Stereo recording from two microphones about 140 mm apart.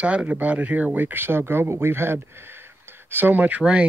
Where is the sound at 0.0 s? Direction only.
10° right (ahead or behind).